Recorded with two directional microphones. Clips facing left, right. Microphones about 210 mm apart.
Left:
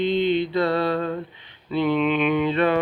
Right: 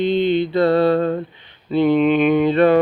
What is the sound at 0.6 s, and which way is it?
Carnatic music, 50° right (ahead or behind).